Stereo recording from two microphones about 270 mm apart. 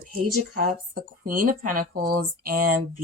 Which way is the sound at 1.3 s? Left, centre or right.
Right.